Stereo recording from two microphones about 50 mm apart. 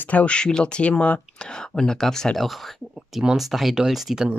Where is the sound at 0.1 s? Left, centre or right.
Left.